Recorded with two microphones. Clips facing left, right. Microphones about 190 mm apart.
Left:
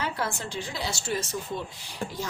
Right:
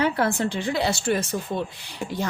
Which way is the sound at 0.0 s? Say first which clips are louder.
Right 9 dB; 60° right (ahead or behind).